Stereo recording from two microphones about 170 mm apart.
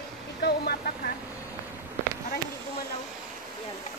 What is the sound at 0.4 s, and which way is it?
Vehicle, 70° left (ahead or behind).